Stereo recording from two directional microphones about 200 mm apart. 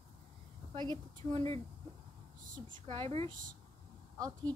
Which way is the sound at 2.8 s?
25° right (ahead or behind).